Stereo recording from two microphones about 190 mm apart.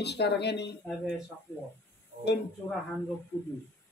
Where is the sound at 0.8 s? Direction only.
Centre (ahead or behind).